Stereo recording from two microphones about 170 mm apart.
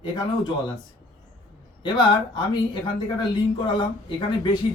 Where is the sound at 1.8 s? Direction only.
25° left (ahead or behind).